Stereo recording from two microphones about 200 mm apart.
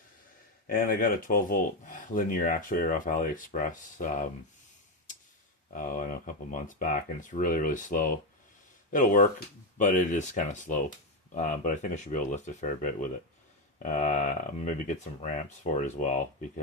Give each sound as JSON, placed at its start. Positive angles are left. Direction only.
{"t": 0.7, "sound": "speech", "side_deg": 45}
{"t": 5.7, "sound": "speech", "side_deg": 40}